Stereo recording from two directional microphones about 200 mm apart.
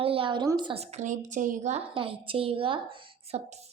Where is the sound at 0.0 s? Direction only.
25° right (ahead or behind).